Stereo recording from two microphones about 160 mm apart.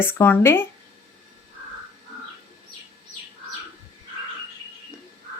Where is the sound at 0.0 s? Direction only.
15° left (ahead or behind).